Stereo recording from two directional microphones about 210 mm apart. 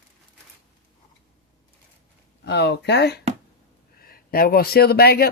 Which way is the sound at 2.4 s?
55° left (ahead or behind).